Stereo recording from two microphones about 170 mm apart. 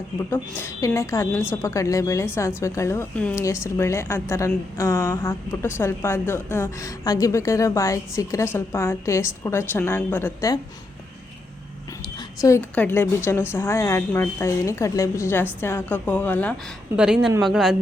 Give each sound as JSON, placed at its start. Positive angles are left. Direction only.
{"t": 0.3, "sound": "a woman's voice", "side_deg": 15}
{"t": 12.1, "sound": "a woman's voice", "side_deg": 20}
{"t": 17.0, "sound": "speech", "side_deg": -5}